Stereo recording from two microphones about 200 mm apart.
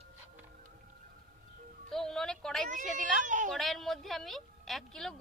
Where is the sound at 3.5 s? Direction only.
Centre (ahead or behind).